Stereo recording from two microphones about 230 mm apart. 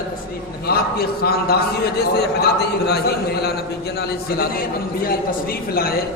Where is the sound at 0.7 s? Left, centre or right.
Left.